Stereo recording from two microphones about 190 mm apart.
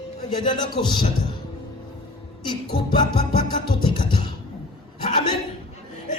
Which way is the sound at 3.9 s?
25° left (ahead or behind).